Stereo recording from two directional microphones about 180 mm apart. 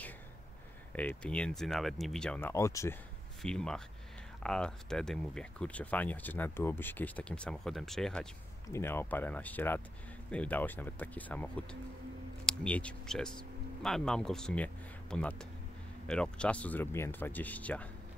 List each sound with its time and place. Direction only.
0.9 s speech: 5° left (ahead or behind)
3.4 s speech: 5° left (ahead or behind)
8.6 s speech: 15° left (ahead or behind)